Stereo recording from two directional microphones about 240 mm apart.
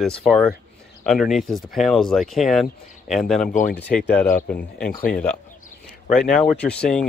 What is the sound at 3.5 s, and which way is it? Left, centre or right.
Speech, left.